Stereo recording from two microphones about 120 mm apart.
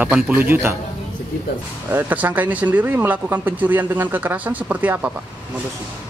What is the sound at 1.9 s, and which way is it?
Speech, 15° right (ahead or behind).